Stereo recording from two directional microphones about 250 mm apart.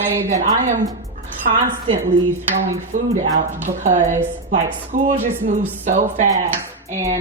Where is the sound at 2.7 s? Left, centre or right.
Right.